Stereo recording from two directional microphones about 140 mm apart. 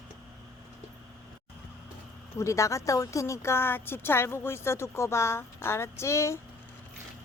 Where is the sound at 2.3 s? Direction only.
20° left (ahead or behind).